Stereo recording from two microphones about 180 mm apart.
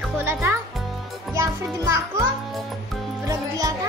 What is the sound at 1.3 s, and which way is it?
Speech, 15° right (ahead or behind).